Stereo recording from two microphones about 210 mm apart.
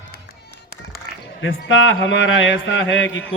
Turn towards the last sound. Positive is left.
turn(degrees=60)  # may be behind; listen again after turning